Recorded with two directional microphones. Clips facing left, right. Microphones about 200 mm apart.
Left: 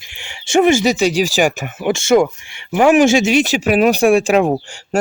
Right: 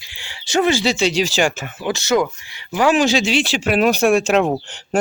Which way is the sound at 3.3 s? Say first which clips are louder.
Left 5 dB; 45° left (ahead or behind).